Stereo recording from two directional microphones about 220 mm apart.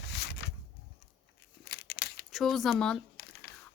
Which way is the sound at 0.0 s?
50° left (ahead or behind).